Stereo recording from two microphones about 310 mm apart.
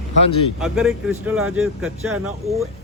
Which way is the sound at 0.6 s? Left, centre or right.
Centre.